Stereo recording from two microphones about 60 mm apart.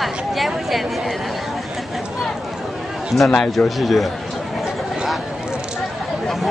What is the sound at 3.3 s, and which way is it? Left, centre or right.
Speech, centre.